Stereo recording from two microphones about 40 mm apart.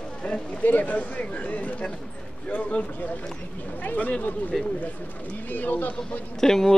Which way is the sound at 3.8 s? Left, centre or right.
Left.